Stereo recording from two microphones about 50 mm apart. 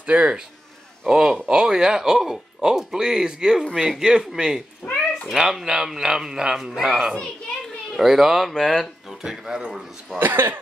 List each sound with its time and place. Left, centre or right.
0.0 s speech: right
1.0 s speech: centre
9.2 s speech: centre
10.1 s speech: right